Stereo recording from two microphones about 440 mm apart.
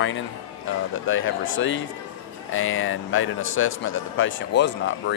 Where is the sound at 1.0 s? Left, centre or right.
Left.